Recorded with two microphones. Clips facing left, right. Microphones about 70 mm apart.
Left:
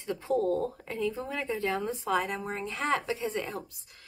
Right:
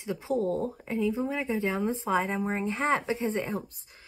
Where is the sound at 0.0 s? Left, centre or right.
Centre.